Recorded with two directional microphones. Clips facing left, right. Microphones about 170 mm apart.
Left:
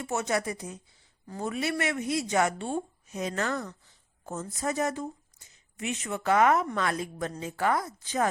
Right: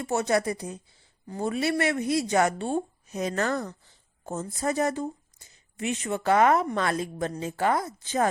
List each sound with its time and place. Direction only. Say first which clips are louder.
0.0 s a woman's voice: right 4 dB; 35° right (ahead or behind)